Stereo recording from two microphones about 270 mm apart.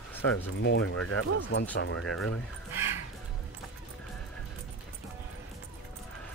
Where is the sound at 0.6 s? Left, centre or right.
Left.